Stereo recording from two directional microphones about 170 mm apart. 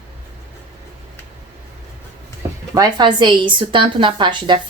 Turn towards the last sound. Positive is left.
turn(degrees=-30)  # may be behind; listen again after turning